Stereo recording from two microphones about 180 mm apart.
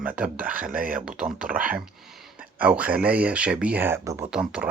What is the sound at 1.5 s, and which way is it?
Speech, 50° right (ahead or behind).